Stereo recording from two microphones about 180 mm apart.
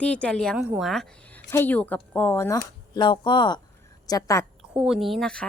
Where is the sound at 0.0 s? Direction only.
5° left (ahead or behind).